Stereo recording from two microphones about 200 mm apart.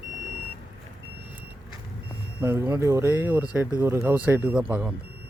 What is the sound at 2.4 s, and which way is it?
Speech, 10° right (ahead or behind).